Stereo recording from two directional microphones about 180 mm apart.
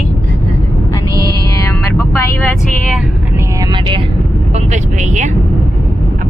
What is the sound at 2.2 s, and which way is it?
Vehicle, 10° left (ahead or behind).